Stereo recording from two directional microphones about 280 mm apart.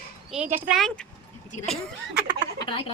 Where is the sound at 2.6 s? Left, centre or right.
Centre.